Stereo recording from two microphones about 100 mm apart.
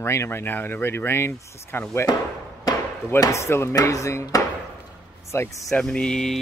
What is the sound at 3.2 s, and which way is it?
Speech, 30° left (ahead or behind).